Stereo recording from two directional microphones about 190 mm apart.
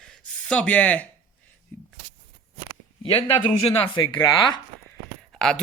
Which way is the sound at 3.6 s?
25° left (ahead or behind).